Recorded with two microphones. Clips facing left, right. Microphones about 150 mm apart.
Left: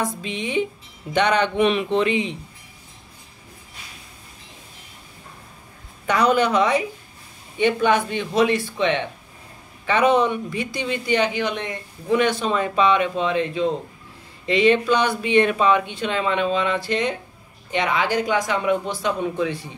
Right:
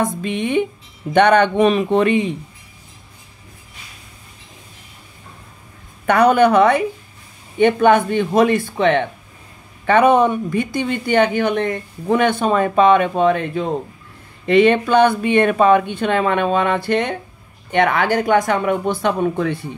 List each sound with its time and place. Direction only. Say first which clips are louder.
0.0 s speech: right 6 dB; 55° right (ahead or behind)
6.0 s speech: right 6 dB; 55° right (ahead or behind)